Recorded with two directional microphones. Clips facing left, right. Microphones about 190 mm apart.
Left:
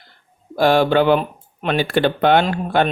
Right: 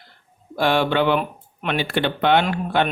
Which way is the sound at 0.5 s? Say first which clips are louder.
Left 5 dB; 40° left (ahead or behind).